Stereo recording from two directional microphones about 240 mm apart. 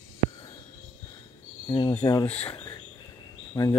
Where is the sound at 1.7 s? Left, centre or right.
Centre.